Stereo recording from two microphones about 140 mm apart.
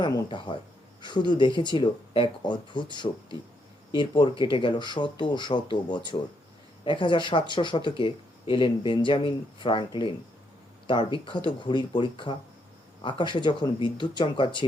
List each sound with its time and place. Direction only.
0.0 s speech: 35° left (ahead or behind)